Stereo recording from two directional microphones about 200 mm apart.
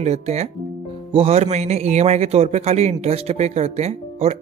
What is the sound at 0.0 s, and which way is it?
A man's voice, 35° right (ahead or behind).